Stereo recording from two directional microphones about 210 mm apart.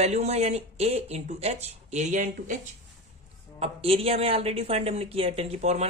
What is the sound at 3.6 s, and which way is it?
Speech, 30° right (ahead or behind).